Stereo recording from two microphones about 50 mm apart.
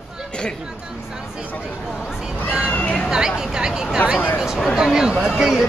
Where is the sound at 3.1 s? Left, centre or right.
Centre.